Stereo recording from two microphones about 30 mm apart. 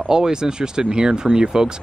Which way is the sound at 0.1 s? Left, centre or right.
Right.